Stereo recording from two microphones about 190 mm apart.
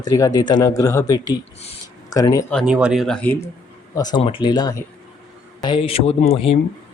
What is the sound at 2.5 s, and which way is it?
Speech, centre (ahead or behind).